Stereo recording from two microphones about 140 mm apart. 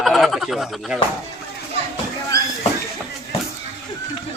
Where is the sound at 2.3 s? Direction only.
25° left (ahead or behind).